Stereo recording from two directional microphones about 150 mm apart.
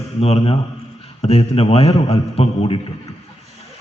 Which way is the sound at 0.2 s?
45° left (ahead or behind).